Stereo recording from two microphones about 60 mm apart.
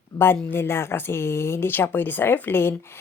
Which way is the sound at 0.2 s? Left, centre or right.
Left.